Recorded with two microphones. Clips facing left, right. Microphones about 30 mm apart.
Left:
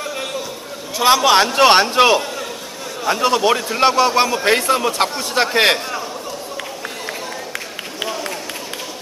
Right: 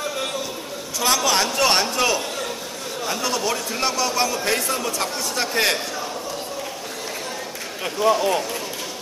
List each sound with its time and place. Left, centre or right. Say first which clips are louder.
0.9 s a man's voice: left 7 dB; left
8.0 s speech: right 7 dB; left